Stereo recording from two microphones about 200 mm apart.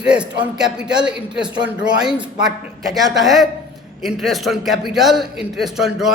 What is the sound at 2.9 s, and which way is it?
A man's voice, centre (ahead or behind).